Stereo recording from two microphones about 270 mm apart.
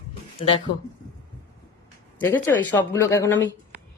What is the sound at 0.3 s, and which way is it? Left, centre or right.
Speech, centre.